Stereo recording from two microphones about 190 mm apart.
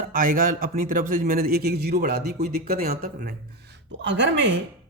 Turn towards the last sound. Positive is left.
turn(degrees=-70)  # may be behind; listen again after turning